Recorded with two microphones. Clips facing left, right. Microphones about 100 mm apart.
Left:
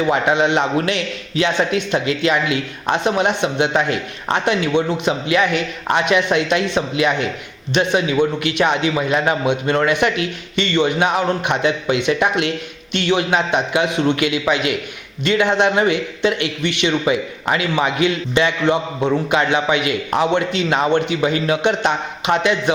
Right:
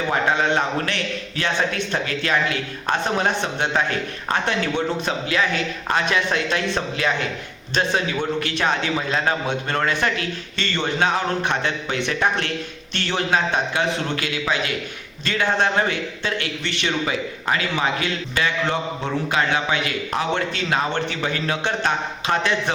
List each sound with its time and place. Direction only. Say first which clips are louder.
0.1 s a man's voice: left 2 dB; 20° left (ahead or behind)
8.4 s a man's voice: left 5 dB; 15° left (ahead or behind)